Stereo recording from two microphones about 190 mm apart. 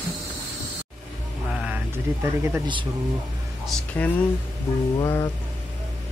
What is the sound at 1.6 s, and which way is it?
Speech, 10° right (ahead or behind).